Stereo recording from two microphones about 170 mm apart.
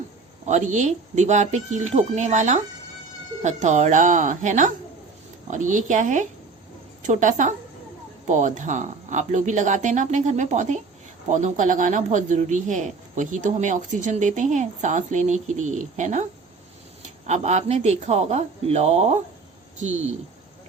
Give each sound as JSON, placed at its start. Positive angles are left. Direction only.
{"t": 0.4, "sound": "speech", "side_deg": -45}
{"t": 17.2, "sound": "speech", "side_deg": -40}